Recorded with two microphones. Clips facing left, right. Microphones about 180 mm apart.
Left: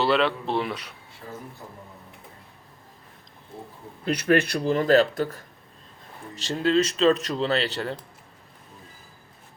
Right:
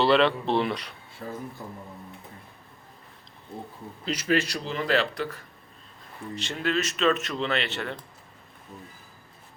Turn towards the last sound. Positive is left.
turn(degrees=35)  # may be behind; listen again after turning